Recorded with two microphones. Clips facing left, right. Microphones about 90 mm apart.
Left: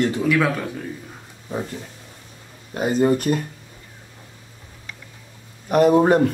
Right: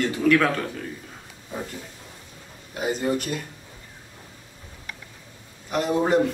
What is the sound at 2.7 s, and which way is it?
Speech, 45° left (ahead or behind).